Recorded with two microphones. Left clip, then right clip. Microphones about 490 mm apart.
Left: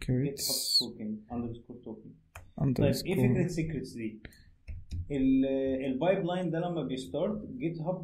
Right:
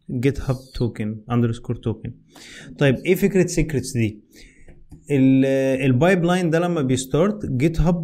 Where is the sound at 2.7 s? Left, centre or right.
Right.